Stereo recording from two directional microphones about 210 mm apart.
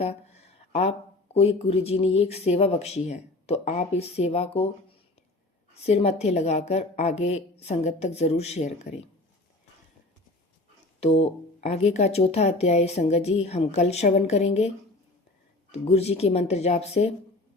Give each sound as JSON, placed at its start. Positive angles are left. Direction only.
{"t": 0.0, "sound": "speech", "side_deg": 30}
{"t": 5.8, "sound": "speech", "side_deg": 30}
{"t": 11.0, "sound": "speech", "side_deg": 30}
{"t": 15.7, "sound": "speech", "side_deg": 30}